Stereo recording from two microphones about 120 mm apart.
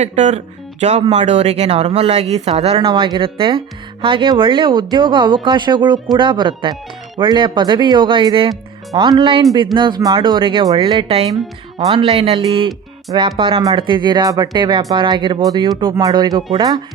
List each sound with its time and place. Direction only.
0.0 s speech: 75° right (ahead or behind)
2.9 s speech: 45° right (ahead or behind)